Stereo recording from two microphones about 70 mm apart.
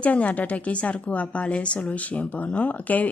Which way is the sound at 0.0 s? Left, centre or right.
Left.